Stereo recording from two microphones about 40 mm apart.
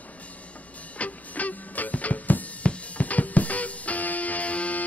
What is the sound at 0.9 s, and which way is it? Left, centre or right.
Music, left.